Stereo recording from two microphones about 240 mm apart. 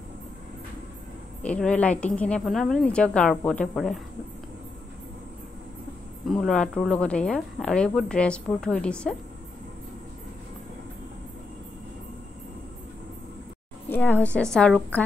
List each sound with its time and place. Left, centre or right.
1.4 s speech: centre
6.2 s speech: centre
13.8 s a woman's voice: centre